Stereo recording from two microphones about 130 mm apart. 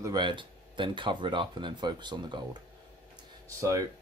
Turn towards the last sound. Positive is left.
turn(degrees=-25)  # may be behind; listen again after turning